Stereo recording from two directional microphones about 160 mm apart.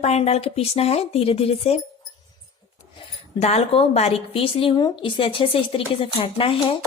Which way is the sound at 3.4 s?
40° left (ahead or behind).